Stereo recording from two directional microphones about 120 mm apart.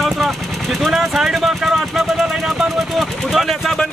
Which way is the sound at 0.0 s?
Centre (ahead or behind).